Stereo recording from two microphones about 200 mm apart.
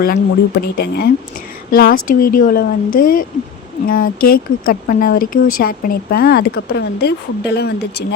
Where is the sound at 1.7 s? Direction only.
50° left (ahead or behind).